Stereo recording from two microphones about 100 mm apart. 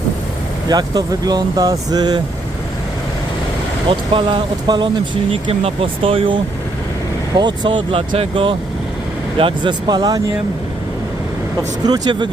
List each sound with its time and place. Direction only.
0.7 s speech: 40° right (ahead or behind)
3.8 s speech: 60° right (ahead or behind)
5.3 s speech: 65° right (ahead or behind)
7.3 s speech: 50° right (ahead or behind)
9.4 s speech: 45° right (ahead or behind)
11.9 s speech: 45° right (ahead or behind)